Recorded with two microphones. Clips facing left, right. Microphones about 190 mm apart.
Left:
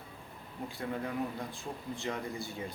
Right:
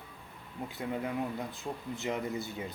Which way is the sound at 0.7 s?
20° right (ahead or behind).